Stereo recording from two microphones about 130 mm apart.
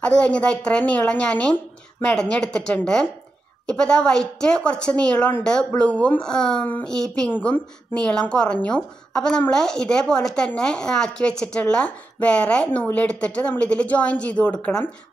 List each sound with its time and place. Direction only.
0.0 s a woman's voice: 10° left (ahead or behind)